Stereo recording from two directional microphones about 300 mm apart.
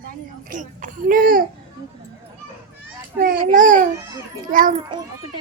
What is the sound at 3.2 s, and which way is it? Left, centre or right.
A woman's voice, right.